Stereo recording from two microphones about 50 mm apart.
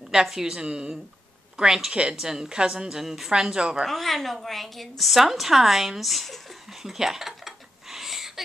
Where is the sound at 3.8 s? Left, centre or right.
Centre.